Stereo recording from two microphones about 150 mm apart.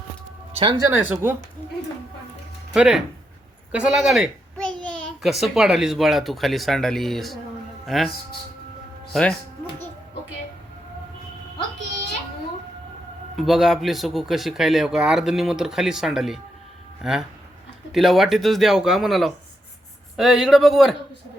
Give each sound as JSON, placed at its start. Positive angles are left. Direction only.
{"t": 0.5, "sound": "speech", "side_deg": -35}
{"t": 0.8, "sound": "speech", "side_deg": -15}
{"t": 2.7, "sound": "a child's voice", "side_deg": -5}
{"t": 13.3, "sound": "speech", "side_deg": 0}